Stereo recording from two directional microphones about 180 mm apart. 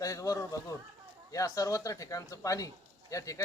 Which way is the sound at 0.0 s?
20° left (ahead or behind).